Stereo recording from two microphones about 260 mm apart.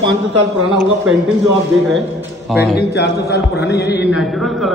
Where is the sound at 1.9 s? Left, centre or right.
Centre.